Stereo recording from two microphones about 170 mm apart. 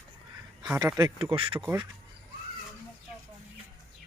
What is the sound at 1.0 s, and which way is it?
Speech, 30° right (ahead or behind).